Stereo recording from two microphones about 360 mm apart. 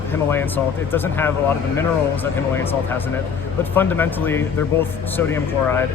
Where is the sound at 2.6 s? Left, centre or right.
Centre.